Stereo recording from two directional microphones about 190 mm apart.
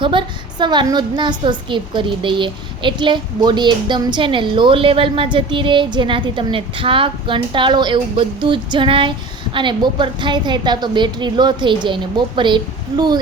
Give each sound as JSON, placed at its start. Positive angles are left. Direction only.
{"t": 0.0, "sound": "a woman's voice", "side_deg": -25}